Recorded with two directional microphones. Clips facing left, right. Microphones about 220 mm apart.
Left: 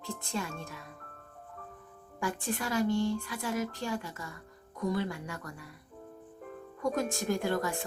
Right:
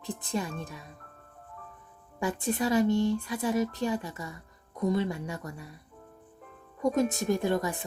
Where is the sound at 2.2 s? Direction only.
20° right (ahead or behind).